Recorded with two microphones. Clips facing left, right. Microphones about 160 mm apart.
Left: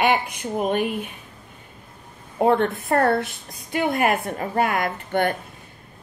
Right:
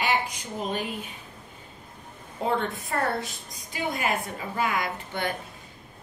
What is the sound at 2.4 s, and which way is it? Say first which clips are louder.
A woman's voice: left 8 dB; 60° left (ahead or behind).